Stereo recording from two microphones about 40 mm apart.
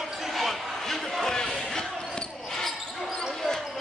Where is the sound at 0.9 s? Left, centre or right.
Centre.